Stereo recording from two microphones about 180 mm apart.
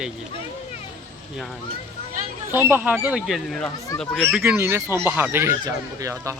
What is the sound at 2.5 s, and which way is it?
Speech, 15° right (ahead or behind).